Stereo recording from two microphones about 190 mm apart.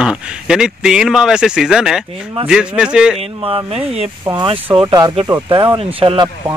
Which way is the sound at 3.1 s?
30° right (ahead or behind).